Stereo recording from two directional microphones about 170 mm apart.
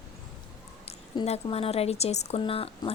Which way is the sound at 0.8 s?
35° left (ahead or behind).